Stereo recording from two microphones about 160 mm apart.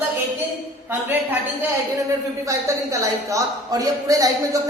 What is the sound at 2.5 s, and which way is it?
A woman's voice, 20° right (ahead or behind).